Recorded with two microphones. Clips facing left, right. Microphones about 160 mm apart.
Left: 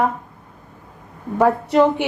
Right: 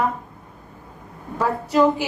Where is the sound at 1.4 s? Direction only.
60° left (ahead or behind).